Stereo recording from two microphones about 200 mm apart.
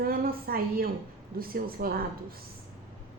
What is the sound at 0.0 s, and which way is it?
A woman's voice, 45° right (ahead or behind).